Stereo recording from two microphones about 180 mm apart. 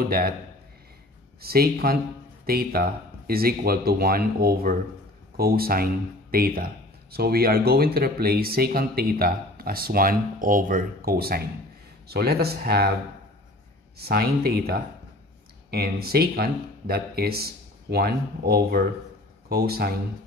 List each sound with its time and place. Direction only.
1.4 s speech: 60° right (ahead or behind)
13.9 s speech: 60° right (ahead or behind)